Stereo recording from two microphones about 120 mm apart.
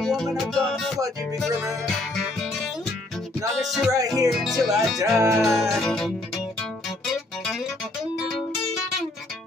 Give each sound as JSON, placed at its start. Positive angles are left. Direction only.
{"t": 0.0, "sound": "music", "side_deg": 0}
{"t": 3.6, "sound": "music", "side_deg": 0}
{"t": 4.9, "sound": "music", "side_deg": -25}
{"t": 5.4, "sound": "music", "side_deg": 0}